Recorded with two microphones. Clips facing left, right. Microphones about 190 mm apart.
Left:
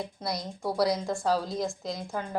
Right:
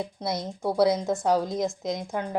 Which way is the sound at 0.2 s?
25° right (ahead or behind).